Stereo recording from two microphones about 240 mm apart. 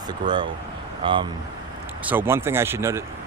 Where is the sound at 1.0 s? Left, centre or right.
Right.